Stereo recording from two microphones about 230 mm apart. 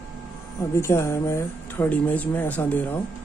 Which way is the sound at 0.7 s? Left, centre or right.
Centre.